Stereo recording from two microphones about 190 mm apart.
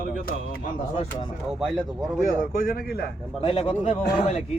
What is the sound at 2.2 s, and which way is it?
Speech, 45° left (ahead or behind).